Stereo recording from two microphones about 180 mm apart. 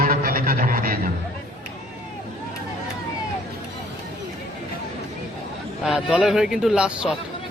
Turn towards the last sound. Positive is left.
turn(degrees=-5)  # may be behind; listen again after turning